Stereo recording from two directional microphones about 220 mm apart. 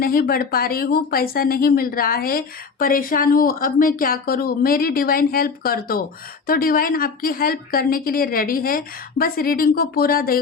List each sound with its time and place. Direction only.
0.0 s speech: 40° left (ahead or behind)